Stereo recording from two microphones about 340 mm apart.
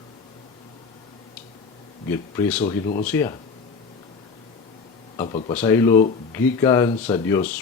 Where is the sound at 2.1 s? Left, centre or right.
Centre.